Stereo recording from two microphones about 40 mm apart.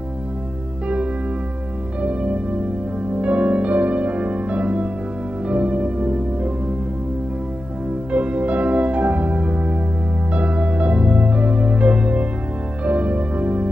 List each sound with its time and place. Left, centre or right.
2.0 s music: right
8.1 s music: right